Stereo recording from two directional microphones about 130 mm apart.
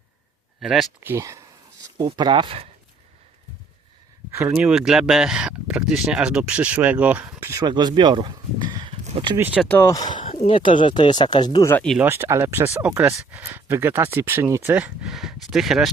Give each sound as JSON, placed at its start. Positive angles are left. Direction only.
{"t": 0.6, "sound": "speech", "side_deg": 0}
{"t": 1.0, "sound": "speech", "side_deg": -20}
{"t": 4.4, "sound": "speech", "side_deg": -5}
{"t": 7.4, "sound": "speech", "side_deg": -25}
{"t": 7.7, "sound": "speech", "side_deg": -35}
{"t": 8.9, "sound": "a sound", "side_deg": -50}
{"t": 9.6, "sound": "speech", "side_deg": 15}
{"t": 9.9, "sound": "speech", "side_deg": 30}
{"t": 10.4, "sound": "speech", "side_deg": 40}
{"t": 11.9, "sound": "speech", "side_deg": -20}
{"t": 15.0, "sound": "speech", "side_deg": -5}